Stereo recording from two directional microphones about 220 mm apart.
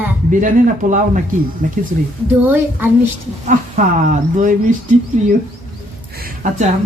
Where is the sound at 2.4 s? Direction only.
10° right (ahead or behind).